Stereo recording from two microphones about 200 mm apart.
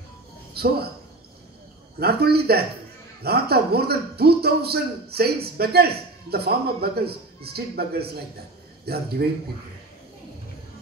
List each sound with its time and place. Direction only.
0.6 s a man's voice: 50° right (ahead or behind)
2.0 s a man's voice: 50° right (ahead or behind)